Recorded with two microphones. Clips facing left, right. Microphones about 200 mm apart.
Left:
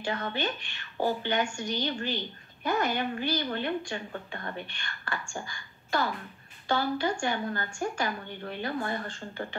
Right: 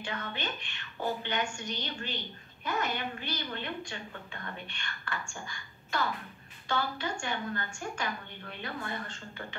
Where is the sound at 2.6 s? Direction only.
35° left (ahead or behind).